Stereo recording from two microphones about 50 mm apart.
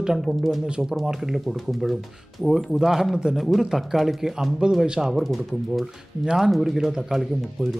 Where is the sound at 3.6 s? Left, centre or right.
Centre.